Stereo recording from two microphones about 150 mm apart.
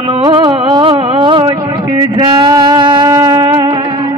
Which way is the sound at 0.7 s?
35° right (ahead or behind).